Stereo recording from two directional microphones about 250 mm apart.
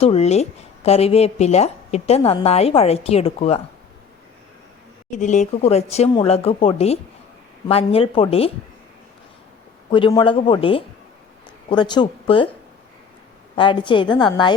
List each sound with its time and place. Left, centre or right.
0.0 s a woman's voice: left
5.1 s a woman's voice: left
9.9 s a woman's voice: centre
13.6 s a woman's voice: centre